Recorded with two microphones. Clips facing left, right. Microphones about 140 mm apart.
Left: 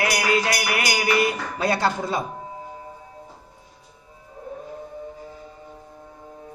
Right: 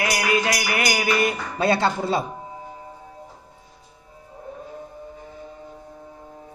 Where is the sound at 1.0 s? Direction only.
25° right (ahead or behind).